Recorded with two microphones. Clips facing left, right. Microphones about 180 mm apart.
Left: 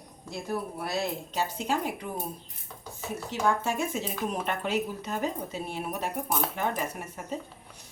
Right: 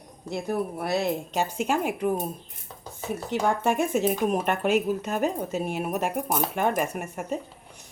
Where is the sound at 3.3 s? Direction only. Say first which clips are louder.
Right 3 dB; 60° right (ahead or behind).